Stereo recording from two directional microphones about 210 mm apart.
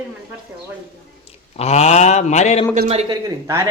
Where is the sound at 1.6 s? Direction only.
30° left (ahead or behind).